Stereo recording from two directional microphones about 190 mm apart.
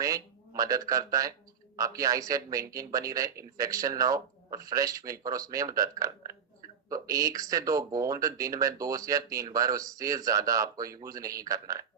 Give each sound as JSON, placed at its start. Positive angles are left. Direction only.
{"t": 0.0, "sound": "speech", "side_deg": -15}